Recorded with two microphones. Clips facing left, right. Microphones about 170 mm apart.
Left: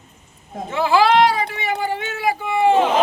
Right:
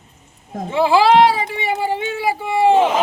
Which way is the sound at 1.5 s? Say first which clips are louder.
Right 2 dB; 30° right (ahead or behind).